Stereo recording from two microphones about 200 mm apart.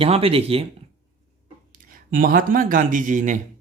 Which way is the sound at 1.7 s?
45° right (ahead or behind).